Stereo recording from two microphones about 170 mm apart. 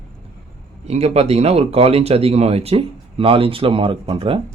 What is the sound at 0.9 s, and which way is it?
Speech, 40° right (ahead or behind).